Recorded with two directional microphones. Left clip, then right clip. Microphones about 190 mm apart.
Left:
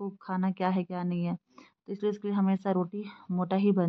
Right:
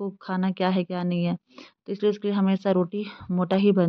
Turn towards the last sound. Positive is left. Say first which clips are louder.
# right 6 dB
turn(degrees=-20)  # may be behind; listen again after turning